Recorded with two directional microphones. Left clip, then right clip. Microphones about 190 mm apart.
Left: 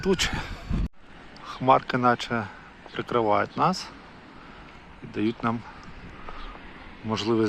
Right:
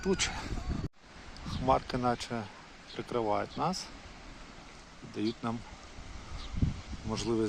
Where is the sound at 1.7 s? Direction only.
5° right (ahead or behind).